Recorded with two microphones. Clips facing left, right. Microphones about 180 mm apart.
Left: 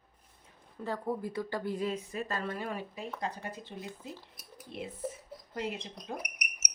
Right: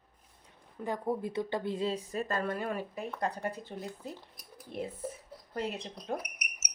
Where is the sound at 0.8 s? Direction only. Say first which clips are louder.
Right 1 dB; 20° right (ahead or behind); by 4.9 s 50° right (ahead or behind).